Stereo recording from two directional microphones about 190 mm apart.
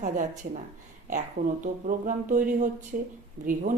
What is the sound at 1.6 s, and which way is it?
Speech, 40° right (ahead or behind).